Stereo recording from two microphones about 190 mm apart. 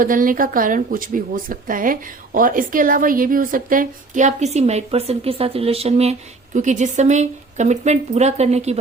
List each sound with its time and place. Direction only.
0.0 s speech: 45° right (ahead or behind)